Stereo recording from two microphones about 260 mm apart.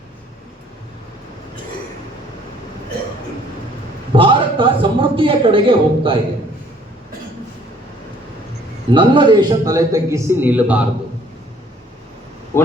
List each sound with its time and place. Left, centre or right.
4.1 s a man's voice: centre
8.9 s a man's voice: centre
12.5 s speech: centre